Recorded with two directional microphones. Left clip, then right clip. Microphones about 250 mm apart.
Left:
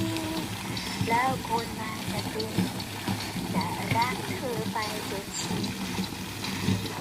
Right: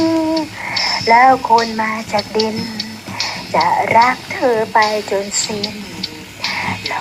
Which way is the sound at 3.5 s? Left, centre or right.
Right.